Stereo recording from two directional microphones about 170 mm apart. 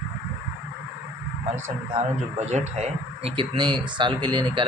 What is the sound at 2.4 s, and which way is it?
Speech, 40° right (ahead or behind).